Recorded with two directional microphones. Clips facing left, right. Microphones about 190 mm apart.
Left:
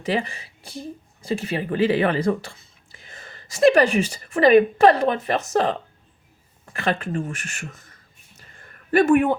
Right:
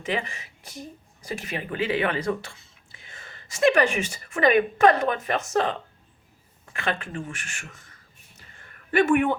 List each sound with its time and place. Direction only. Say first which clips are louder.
0.0 s speech: left 5 dB; 35° left (ahead or behind)
6.7 s speech: left 5 dB; 40° left (ahead or behind)
8.9 s speech: left 4 dB; 40° left (ahead or behind)